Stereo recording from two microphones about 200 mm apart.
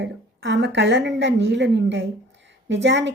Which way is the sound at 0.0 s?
60° right (ahead or behind).